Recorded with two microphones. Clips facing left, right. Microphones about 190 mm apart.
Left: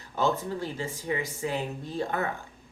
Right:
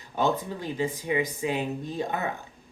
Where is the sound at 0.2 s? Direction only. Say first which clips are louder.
Right 1 dB; 20° right (ahead or behind).